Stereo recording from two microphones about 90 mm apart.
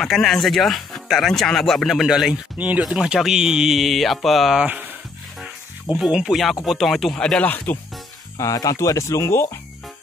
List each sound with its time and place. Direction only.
0.0 s speech: centre (ahead or behind)
2.5 s speech: 15° right (ahead or behind)
4.6 s speech: 15° right (ahead or behind)
5.9 s speech: 5° right (ahead or behind); by 7.7 s 20° left (ahead or behind)
8.4 s speech: 40° left (ahead or behind)